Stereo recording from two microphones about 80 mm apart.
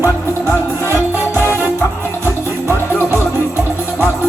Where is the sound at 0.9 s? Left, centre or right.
Right.